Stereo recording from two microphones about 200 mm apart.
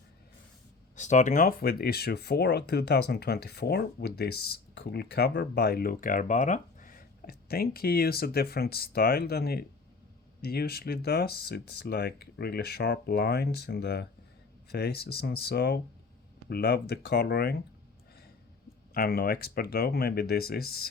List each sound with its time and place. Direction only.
0.9 s speech: 35° left (ahead or behind)
18.9 s speech: 50° left (ahead or behind)